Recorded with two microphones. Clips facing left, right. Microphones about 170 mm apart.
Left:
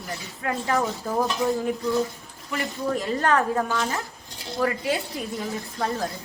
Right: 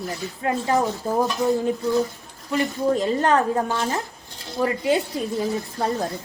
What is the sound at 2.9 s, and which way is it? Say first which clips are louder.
A woman's voice: right 2 dB; 25° right (ahead or behind).